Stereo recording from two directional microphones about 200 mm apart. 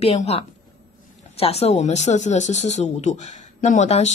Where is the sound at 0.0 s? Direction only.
30° left (ahead or behind).